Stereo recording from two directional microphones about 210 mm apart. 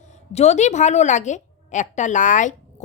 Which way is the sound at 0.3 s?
35° left (ahead or behind).